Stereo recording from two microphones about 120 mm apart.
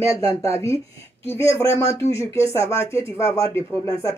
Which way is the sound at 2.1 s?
20° left (ahead or behind).